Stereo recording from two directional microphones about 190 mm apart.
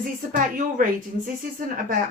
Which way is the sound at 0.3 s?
45° right (ahead or behind).